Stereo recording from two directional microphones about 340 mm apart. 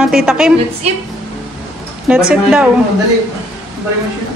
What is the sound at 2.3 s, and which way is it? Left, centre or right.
Speech, centre.